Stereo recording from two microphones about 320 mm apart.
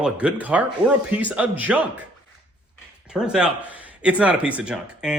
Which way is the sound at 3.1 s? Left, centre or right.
Centre.